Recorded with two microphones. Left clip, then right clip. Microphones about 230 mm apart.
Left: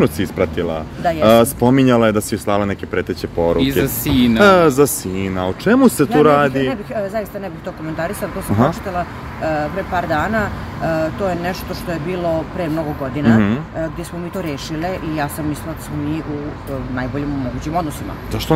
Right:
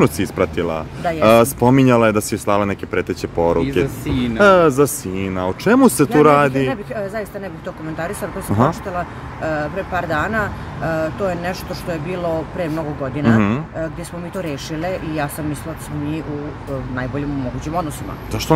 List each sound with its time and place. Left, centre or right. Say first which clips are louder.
0.0 s speech: even; centre
3.8 s speech: left 4 dB; left
4.4 s speech: even; centre
8.5 s speech: even; centre
13.2 s speech: left 1 dB; centre
17.7 s speech: left 2 dB; centre